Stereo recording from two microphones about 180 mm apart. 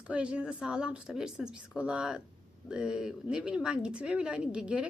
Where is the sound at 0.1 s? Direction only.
5° right (ahead or behind).